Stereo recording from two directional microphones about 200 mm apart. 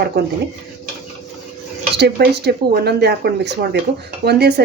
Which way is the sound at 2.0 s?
55° right (ahead or behind).